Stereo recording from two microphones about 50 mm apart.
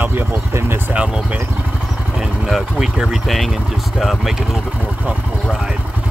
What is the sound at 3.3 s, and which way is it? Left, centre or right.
Speech, centre.